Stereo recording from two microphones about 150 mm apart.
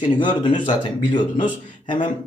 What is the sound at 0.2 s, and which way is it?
Speech, 30° left (ahead or behind).